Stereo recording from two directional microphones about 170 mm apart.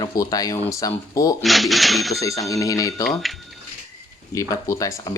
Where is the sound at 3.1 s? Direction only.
Centre (ahead or behind).